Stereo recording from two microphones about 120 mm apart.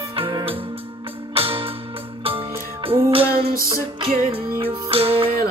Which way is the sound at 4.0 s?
50° right (ahead or behind).